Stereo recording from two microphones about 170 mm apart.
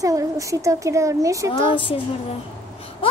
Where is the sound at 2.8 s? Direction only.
35° left (ahead or behind).